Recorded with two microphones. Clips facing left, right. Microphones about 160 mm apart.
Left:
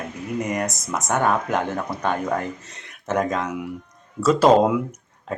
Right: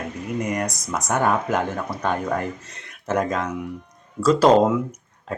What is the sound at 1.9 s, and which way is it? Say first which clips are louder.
Speech: left 1 dB; 25° left (ahead or behind).